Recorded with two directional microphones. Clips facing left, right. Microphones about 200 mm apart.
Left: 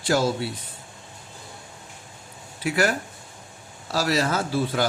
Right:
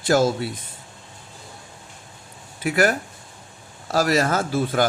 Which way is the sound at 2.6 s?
50° right (ahead or behind).